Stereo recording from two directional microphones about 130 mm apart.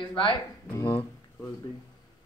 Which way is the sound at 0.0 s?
40° left (ahead or behind).